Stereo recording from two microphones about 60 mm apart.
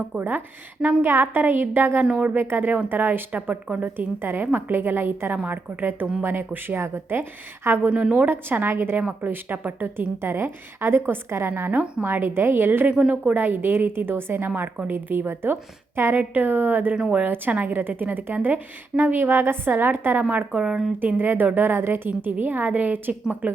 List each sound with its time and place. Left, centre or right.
0.2 s a woman's voice: right
2.0 s a woman's voice: right
2.3 s a woman's voice: right
7.9 s a woman's voice: centre
8.3 s a woman's voice: right
9.0 s a woman's voice: right
11.7 s a woman's voice: right
12.0 s a woman's voice: right
12.8 s a woman's voice: right
13.3 s a woman's voice: right
16.9 s a woman's voice: centre
17.2 s a woman's voice: right
20.5 s a woman's voice: centre
21.2 s a woman's voice: right